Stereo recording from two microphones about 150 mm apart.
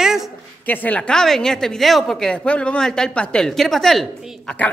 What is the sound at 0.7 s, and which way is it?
A man's voice, 10° left (ahead or behind).